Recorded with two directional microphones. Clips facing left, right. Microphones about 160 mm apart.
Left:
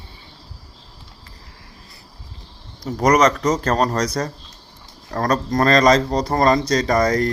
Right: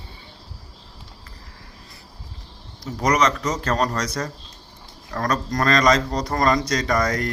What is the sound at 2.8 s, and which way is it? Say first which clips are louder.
Speech: left 5 dB; 45° left (ahead or behind).